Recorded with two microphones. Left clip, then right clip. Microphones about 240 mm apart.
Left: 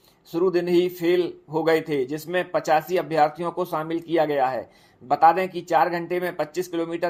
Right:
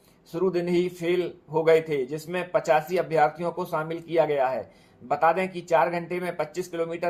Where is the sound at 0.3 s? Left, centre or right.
Left.